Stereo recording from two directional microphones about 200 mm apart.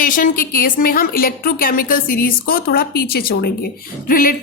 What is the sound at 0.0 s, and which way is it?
A woman's voice, 45° left (ahead or behind).